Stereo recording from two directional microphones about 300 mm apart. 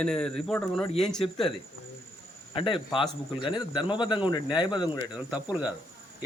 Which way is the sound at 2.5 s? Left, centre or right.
Centre.